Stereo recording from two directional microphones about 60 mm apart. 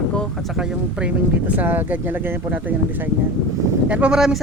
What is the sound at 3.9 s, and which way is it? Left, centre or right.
Speech, centre.